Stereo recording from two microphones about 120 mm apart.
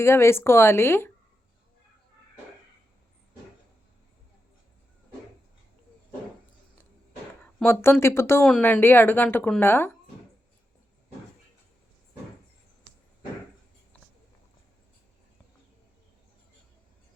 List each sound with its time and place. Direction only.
0.0 s speech: 20° left (ahead or behind)
7.7 s a woman's voice: 20° left (ahead or behind)